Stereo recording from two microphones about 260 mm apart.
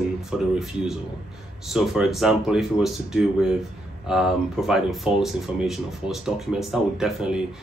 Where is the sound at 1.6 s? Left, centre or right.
Centre.